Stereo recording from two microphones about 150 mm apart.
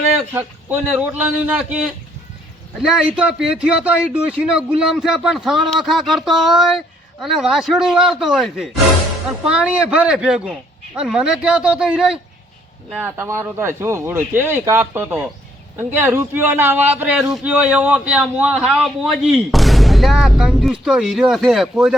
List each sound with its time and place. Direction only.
0.3 s speech: 10° right (ahead or behind)
3.2 s a man's voice: 5° right (ahead or behind)
13.1 s a man's voice: 15° right (ahead or behind)